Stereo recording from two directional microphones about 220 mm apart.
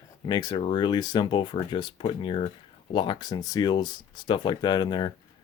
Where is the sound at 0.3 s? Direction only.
20° left (ahead or behind).